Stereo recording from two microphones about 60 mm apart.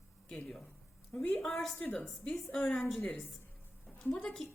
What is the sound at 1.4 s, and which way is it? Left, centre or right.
A woman's voice, centre.